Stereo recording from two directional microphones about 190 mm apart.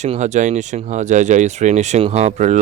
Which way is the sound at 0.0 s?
40° right (ahead or behind).